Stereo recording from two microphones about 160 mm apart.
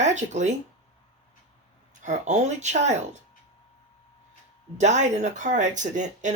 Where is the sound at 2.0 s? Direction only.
50° right (ahead or behind).